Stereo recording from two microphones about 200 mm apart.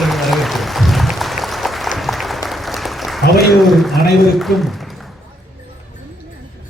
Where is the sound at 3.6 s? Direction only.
Centre (ahead or behind).